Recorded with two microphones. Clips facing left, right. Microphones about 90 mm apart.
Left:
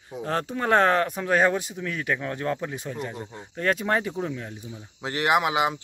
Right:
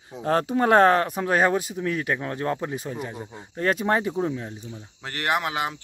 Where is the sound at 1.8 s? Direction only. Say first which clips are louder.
Right 2 dB; 20° right (ahead or behind).